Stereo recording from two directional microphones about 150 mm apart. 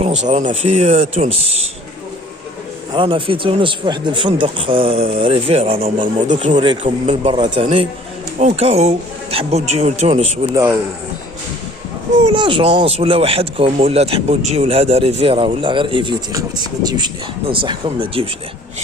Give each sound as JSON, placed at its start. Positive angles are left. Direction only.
{"t": 0.0, "sound": "speech", "side_deg": -50}
{"t": 2.9, "sound": "speech", "side_deg": -35}
{"t": 10.5, "sound": "speech", "side_deg": -15}
{"t": 12.3, "sound": "speech", "side_deg": -35}